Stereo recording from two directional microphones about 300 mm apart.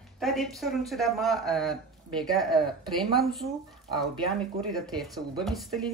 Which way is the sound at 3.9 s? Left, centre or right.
Centre.